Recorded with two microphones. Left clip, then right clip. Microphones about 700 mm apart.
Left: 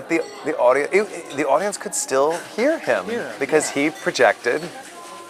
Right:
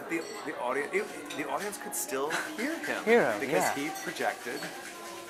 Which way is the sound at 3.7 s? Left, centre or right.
Left.